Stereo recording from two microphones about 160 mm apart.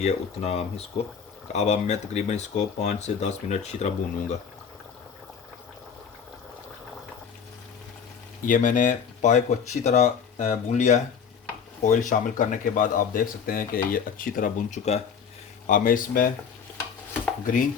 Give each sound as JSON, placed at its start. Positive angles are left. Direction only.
{"t": 0.0, "sound": "speech", "side_deg": 40}
{"t": 8.4, "sound": "speech", "side_deg": 55}
{"t": 17.4, "sound": "speech", "side_deg": 55}